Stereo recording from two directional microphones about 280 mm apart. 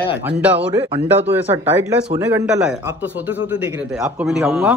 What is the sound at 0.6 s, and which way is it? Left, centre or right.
A man's voice, centre.